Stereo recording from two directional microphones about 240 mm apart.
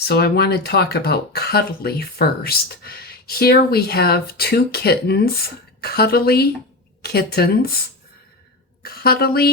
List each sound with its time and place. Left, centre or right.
0.1 s speech: left
8.8 s a woman's voice: left